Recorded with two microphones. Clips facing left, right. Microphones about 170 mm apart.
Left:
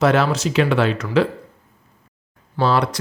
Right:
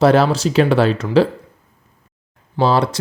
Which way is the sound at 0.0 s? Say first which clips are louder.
Right 4 dB; 35° right (ahead or behind).